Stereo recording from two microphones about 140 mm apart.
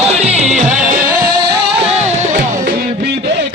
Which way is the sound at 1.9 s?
55° right (ahead or behind).